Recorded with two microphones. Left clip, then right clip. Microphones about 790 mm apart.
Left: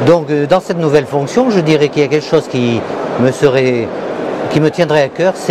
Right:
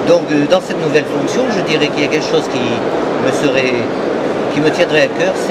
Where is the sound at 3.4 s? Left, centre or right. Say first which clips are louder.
Left 5 dB; left.